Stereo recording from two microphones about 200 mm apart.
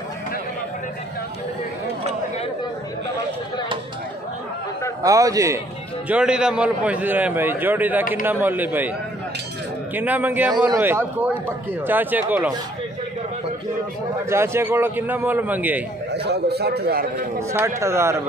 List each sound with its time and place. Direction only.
5.0 s a man's voice: 15° right (ahead or behind)
6.0 s a man's voice: 5° right (ahead or behind)
9.9 s a man's voice: 10° right (ahead or behind)
14.3 s a man's voice: 10° right (ahead or behind)
16.1 s a man's voice: 55° right (ahead or behind)
17.5 s a man's voice: 15° right (ahead or behind)